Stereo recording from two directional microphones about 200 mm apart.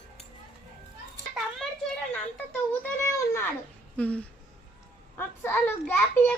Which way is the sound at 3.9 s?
5° left (ahead or behind).